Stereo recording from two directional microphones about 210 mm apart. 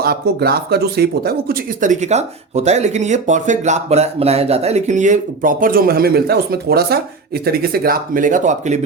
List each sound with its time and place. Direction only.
0.0 s speech: 50° right (ahead or behind)